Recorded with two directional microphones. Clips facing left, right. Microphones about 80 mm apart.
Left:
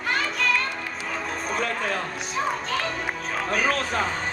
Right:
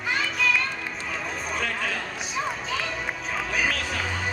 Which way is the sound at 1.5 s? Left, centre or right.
Left.